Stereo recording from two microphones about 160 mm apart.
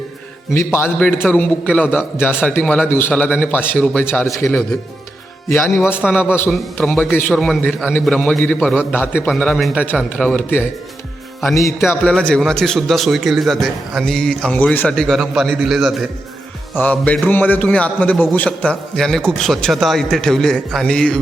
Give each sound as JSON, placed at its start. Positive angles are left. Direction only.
{"t": 0.5, "sound": "a man's voice", "side_deg": 15}
{"t": 8.9, "sound": "a man's voice", "side_deg": 15}
{"t": 11.9, "sound": "a man's voice", "side_deg": 5}
{"t": 16.7, "sound": "a man's voice", "side_deg": 10}